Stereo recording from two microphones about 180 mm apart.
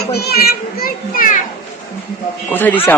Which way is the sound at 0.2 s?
60° left (ahead or behind).